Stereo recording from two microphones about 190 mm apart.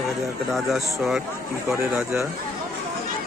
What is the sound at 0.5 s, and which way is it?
A man's voice, centre (ahead or behind).